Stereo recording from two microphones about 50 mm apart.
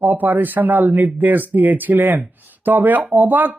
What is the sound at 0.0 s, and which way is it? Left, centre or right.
Speech, right.